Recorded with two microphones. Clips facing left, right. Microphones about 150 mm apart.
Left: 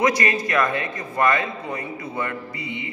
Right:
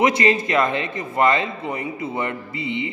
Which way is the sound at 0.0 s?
25° right (ahead or behind).